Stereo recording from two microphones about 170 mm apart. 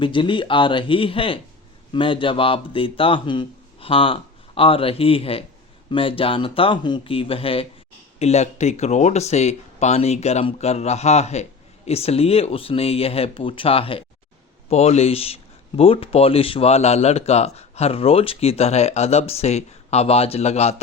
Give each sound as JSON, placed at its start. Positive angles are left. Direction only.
{"t": 0.0, "sound": "speech", "side_deg": 30}